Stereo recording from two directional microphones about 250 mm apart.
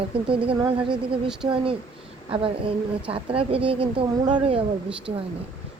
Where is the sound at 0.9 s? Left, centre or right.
Centre.